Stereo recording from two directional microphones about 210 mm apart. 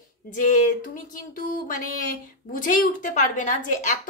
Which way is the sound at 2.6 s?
40° left (ahead or behind).